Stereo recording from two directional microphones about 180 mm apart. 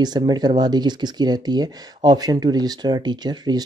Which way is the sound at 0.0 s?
25° right (ahead or behind).